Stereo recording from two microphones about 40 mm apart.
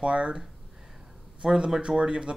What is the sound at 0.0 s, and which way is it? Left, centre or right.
Speech, right.